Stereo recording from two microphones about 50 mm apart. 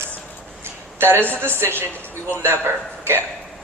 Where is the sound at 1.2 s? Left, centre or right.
Left.